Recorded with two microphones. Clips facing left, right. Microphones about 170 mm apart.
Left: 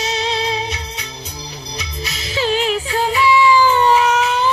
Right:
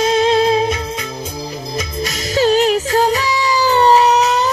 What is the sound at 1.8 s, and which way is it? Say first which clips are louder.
Music: right 7 dB; 45° right (ahead or behind).